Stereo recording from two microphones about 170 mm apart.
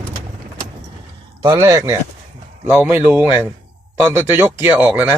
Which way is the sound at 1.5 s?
15° right (ahead or behind).